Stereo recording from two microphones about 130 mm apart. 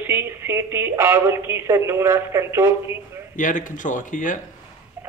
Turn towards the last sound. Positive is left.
turn(degrees=85)